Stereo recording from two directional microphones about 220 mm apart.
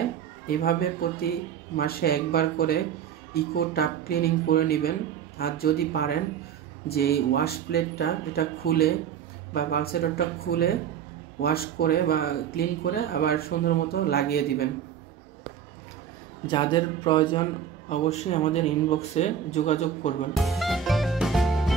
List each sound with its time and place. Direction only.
0.5 s speech: 45° left (ahead or behind)
16.4 s speech: 20° left (ahead or behind)
20.3 s music: centre (ahead or behind)